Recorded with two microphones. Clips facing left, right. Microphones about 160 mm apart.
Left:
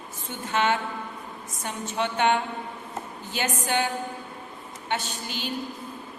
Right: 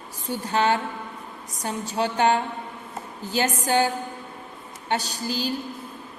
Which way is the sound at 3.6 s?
35° right (ahead or behind).